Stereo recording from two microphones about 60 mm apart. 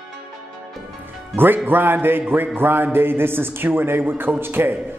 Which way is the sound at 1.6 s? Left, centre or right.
Right.